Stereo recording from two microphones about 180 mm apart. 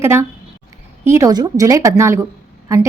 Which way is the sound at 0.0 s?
15° right (ahead or behind).